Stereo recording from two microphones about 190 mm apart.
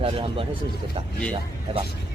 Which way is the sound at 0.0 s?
30° right (ahead or behind).